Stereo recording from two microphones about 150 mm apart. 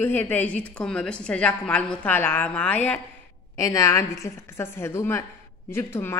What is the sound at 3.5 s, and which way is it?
A woman's voice, 25° left (ahead or behind).